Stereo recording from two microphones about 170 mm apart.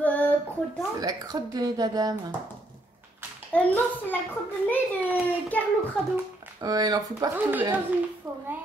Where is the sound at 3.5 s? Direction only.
10° left (ahead or behind).